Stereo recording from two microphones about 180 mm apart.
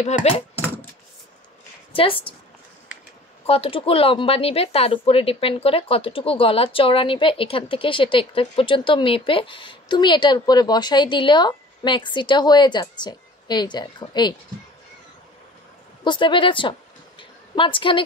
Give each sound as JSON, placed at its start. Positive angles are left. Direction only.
{"t": 0.0, "sound": "speech", "side_deg": 35}
{"t": 2.0, "sound": "speech", "side_deg": 30}
{"t": 3.4, "sound": "speech", "side_deg": 30}
{"t": 16.0, "sound": "speech", "side_deg": 25}
{"t": 17.2, "sound": "a sound", "side_deg": 30}